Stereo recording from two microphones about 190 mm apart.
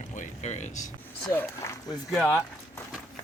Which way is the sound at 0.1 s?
40° left (ahead or behind).